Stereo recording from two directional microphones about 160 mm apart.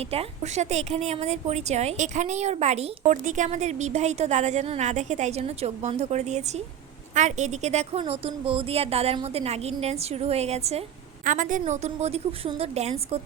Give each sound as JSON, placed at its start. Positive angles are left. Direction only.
{"t": 0.1, "sound": "a woman's voice", "side_deg": -40}
{"t": 11.3, "sound": "a woman's voice", "side_deg": -55}